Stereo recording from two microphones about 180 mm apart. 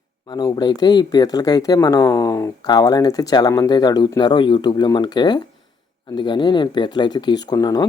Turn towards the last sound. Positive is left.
turn(degrees=20)  # may be behind; listen again after turning